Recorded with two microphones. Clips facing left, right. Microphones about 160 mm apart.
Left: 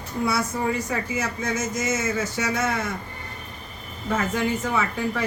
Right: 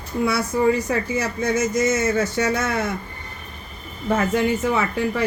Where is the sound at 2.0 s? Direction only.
35° right (ahead or behind).